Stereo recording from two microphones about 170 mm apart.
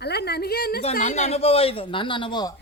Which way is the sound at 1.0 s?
45° left (ahead or behind).